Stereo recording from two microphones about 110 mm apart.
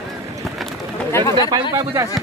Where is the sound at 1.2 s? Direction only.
35° right (ahead or behind).